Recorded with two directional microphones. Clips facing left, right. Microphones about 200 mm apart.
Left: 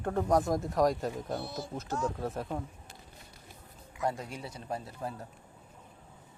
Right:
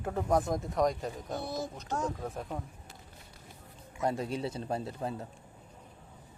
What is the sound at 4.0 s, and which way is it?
A man's voice, 25° right (ahead or behind).